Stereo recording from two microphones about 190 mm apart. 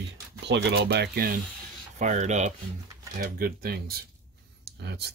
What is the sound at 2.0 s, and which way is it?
Speech, 40° right (ahead or behind).